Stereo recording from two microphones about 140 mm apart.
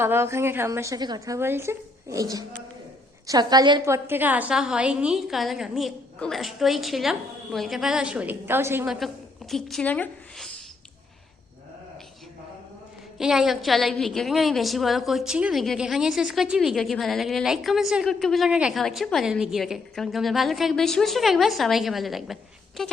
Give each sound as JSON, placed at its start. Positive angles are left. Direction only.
{"t": 0.0, "sound": "a woman's voice", "side_deg": -15}
{"t": 3.2, "sound": "a woman's voice", "side_deg": -30}
{"t": 3.8, "sound": "a woman's voice", "side_deg": -20}
{"t": 9.5, "sound": "a woman's voice", "side_deg": 0}
{"t": 13.1, "sound": "a woman's voice", "side_deg": -5}